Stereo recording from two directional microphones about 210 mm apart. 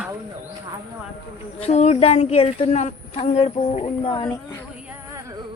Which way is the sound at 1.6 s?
30° left (ahead or behind).